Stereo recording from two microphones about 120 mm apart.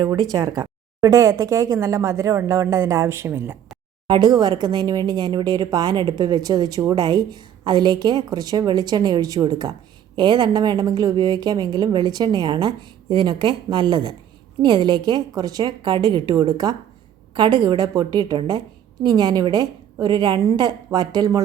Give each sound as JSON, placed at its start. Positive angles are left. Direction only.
{"t": 0.1, "sound": "speech", "side_deg": -30}
{"t": 4.0, "sound": "speech", "side_deg": -40}